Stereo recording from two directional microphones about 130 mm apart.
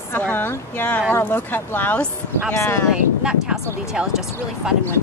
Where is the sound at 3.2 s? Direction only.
5° right (ahead or behind).